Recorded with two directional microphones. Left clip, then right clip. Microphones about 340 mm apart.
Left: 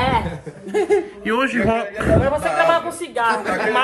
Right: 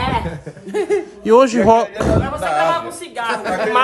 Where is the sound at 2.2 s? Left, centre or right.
Centre.